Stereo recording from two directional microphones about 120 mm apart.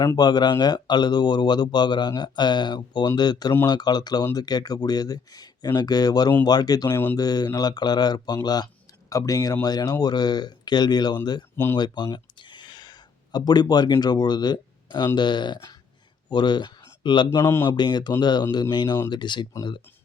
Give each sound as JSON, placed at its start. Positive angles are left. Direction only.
{"t": 0.0, "sound": "speech", "side_deg": 30}
{"t": 6.9, "sound": "speech", "side_deg": 15}
{"t": 7.2, "sound": "speech", "side_deg": 35}
{"t": 11.5, "sound": "speech", "side_deg": 20}
{"t": 11.8, "sound": "a man's voice", "side_deg": 40}
{"t": 17.3, "sound": "a man's voice", "side_deg": 25}
{"t": 17.6, "sound": "speech", "side_deg": 35}